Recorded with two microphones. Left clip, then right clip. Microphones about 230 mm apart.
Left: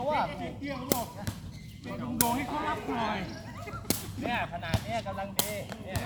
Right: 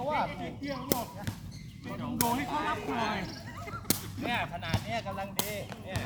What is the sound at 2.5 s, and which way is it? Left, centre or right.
Speech, right.